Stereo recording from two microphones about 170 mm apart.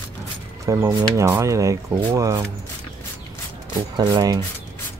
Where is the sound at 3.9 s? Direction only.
25° right (ahead or behind).